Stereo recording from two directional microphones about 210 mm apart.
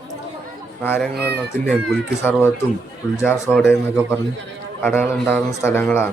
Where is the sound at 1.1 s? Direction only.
50° right (ahead or behind).